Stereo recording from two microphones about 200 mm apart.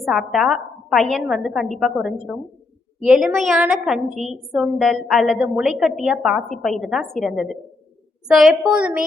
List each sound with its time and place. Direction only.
0.0 s a woman's voice: centre (ahead or behind)